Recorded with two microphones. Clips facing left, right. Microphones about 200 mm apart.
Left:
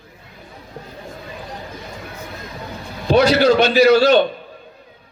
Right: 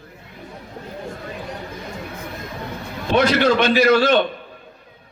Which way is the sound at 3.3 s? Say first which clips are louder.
Left 3 dB; 35° left (ahead or behind).